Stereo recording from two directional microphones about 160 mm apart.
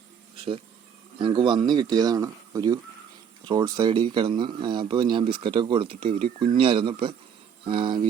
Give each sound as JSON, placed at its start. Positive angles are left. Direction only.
{"t": 1.2, "sound": "speech", "side_deg": -30}